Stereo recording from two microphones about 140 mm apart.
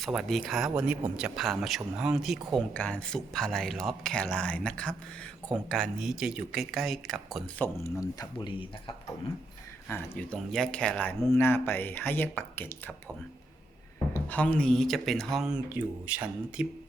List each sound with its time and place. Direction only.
0.0 s speech: centre (ahead or behind)
7.6 s speech: 20° left (ahead or behind)
9.9 s speech: 10° left (ahead or behind)
11.2 s speech: 20° left (ahead or behind)
14.1 s speech: 10° left (ahead or behind); by 16.6 s 10° right (ahead or behind)